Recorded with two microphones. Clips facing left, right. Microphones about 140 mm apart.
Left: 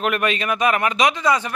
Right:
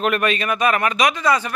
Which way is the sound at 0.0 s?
10° left (ahead or behind).